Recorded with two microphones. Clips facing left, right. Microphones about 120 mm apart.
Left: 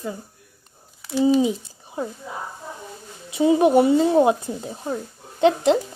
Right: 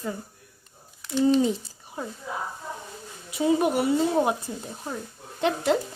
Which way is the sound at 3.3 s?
20° left (ahead or behind).